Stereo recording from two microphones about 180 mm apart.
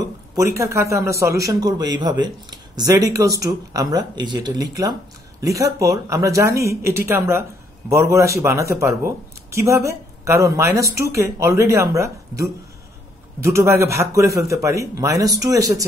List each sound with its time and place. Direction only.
0.4 s a man's voice: 15° right (ahead or behind)